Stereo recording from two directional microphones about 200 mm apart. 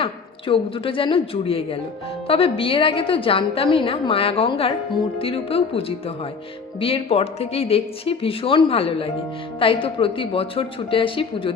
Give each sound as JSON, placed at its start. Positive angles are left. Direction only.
{"t": 0.0, "sound": "a woman's voice", "side_deg": 25}